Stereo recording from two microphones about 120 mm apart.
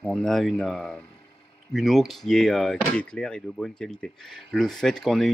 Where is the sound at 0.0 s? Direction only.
5° left (ahead or behind).